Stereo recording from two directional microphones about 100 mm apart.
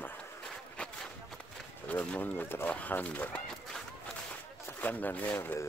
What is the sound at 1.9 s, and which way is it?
Speech, 15° left (ahead or behind).